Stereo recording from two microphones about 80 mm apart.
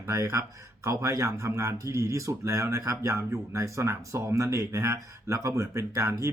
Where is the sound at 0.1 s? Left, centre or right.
Right.